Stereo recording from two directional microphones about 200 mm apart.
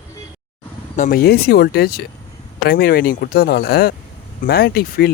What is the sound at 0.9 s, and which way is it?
Speech, 45° left (ahead or behind).